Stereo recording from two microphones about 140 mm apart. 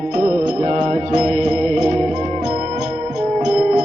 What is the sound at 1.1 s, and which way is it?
Mantra, 65° right (ahead or behind).